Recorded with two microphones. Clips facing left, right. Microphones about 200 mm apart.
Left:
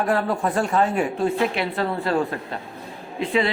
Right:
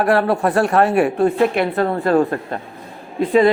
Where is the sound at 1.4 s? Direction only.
55° right (ahead or behind).